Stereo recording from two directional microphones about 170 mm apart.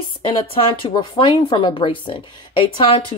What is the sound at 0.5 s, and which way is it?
Speech, 30° left (ahead or behind).